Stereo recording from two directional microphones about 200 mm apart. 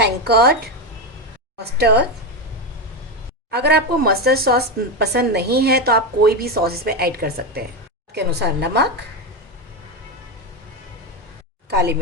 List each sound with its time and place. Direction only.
0.0 s speech: 55° right (ahead or behind)
1.5 s a woman's voice: 55° right (ahead or behind)
3.5 s a woman's voice: 55° right (ahead or behind)
11.7 s a woman's voice: 55° right (ahead or behind)